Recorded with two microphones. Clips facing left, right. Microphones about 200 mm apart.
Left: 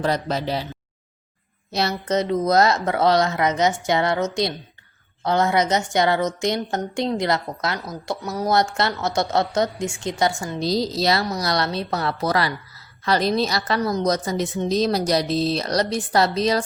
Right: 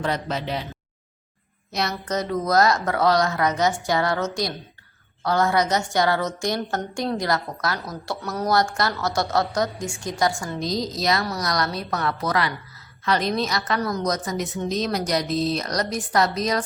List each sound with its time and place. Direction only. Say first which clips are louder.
0.0 s a woman's voice: left 3 dB; 35° left (ahead or behind)
1.7 s a woman's voice: left 4 dB; 25° left (ahead or behind)